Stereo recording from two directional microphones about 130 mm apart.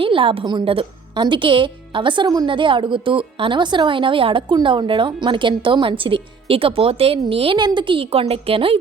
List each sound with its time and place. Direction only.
0.0 s a woman's voice: 40° right (ahead or behind)